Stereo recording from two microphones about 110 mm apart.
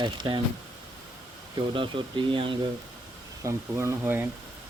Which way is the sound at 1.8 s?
50° right (ahead or behind).